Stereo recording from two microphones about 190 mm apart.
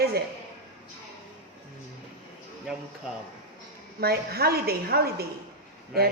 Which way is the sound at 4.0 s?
55° right (ahead or behind).